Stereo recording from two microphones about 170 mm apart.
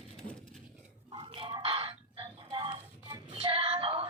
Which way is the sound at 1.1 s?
30° right (ahead or behind).